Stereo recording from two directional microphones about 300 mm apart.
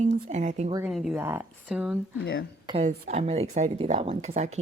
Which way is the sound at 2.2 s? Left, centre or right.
Left.